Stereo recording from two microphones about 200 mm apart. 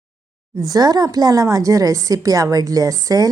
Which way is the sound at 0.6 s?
20° right (ahead or behind).